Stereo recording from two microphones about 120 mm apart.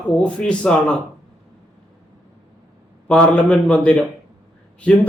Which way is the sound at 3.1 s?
10° left (ahead or behind).